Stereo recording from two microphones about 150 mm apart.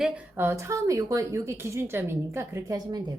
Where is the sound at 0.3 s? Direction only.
15° right (ahead or behind).